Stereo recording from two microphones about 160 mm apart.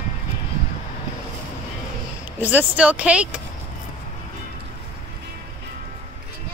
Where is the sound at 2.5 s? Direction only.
10° right (ahead or behind).